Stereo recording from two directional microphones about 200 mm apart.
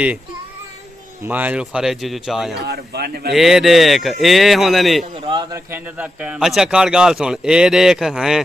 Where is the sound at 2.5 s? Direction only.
55° right (ahead or behind).